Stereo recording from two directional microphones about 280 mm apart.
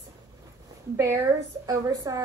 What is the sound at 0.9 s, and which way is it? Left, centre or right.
A woman's voice, centre.